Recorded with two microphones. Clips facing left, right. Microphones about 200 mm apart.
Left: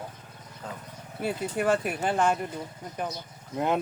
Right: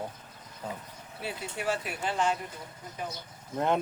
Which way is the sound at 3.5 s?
5° left (ahead or behind).